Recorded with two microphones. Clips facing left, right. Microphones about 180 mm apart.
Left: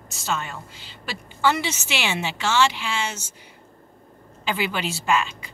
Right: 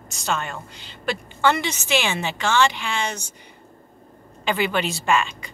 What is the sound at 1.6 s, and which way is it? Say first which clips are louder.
A woman's voice: right 4 dB; 50° right (ahead or behind).